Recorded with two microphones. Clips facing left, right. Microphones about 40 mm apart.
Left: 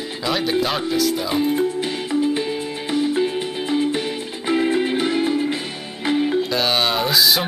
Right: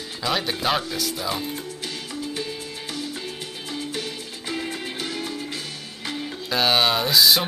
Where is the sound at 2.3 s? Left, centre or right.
Left.